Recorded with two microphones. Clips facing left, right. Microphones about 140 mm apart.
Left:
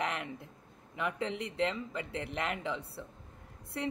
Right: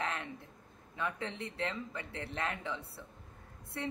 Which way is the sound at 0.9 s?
20° left (ahead or behind).